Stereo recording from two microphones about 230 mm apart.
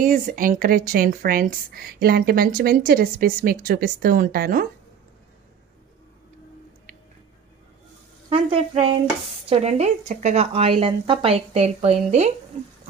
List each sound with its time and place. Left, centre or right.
0.0 s a woman's voice: right
8.3 s speech: right